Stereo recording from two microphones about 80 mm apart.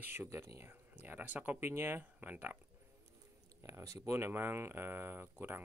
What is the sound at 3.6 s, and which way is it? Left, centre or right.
Speech, right.